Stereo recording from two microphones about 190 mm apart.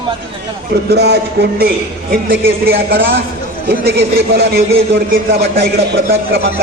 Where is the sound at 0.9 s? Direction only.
60° right (ahead or behind).